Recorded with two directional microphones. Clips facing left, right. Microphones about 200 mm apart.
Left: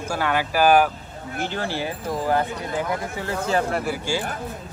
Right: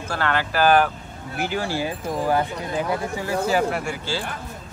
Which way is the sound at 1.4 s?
10° right (ahead or behind).